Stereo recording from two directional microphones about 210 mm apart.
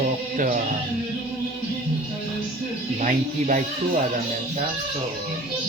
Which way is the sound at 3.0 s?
35° right (ahead or behind).